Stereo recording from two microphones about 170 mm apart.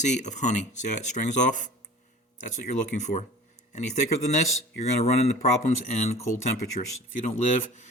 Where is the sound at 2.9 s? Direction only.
45° left (ahead or behind).